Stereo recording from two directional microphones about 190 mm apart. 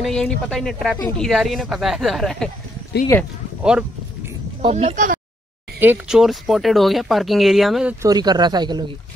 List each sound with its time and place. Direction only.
0.0 s speech: 5° left (ahead or behind)
4.6 s speech: 30° right (ahead or behind)
5.8 s speech: 5° right (ahead or behind)
8.0 s speech: 20° right (ahead or behind)